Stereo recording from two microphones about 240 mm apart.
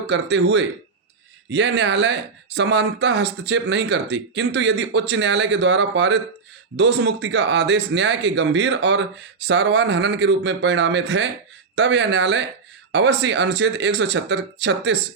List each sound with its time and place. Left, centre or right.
0.1 s speech: right